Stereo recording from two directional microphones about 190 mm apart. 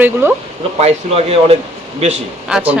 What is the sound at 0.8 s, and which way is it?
Speech, 35° right (ahead or behind).